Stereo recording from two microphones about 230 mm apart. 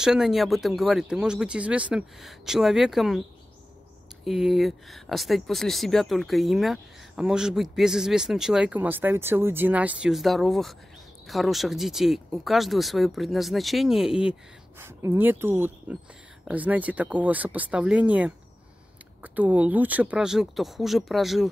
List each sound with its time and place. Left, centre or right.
0.0 s speech: centre
4.2 s speech: centre